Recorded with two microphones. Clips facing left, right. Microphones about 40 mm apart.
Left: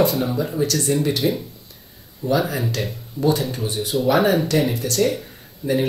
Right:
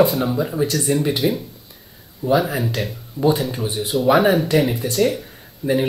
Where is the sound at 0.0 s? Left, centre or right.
Centre.